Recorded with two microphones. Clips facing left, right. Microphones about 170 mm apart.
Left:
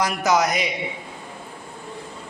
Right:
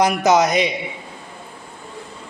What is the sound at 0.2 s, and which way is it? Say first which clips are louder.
Speech: right 5 dB; 20° right (ahead or behind).